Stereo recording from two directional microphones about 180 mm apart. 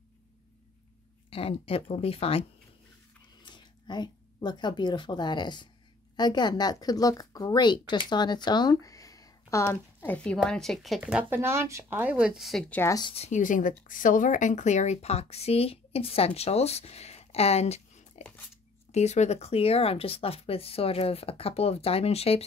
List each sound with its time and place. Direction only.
1.3 s speech: 30° left (ahead or behind)
3.4 s speech: 25° left (ahead or behind); by 12.9 s 10° left (ahead or behind)
12.9 s speech: 30° left (ahead or behind)